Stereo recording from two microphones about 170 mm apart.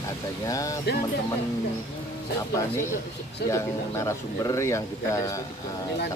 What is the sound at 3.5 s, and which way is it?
Speech, 15° left (ahead or behind).